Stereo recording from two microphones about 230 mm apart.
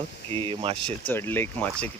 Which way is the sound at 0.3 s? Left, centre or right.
Right.